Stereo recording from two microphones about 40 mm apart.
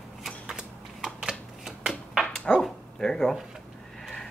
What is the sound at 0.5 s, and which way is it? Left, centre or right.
Shuffling cards, centre.